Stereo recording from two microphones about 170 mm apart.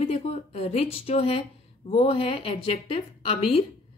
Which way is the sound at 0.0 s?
40° left (ahead or behind).